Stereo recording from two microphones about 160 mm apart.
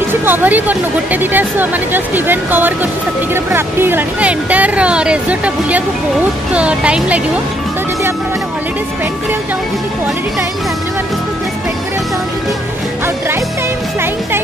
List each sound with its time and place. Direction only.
0.2 s speech: 10° right (ahead or behind)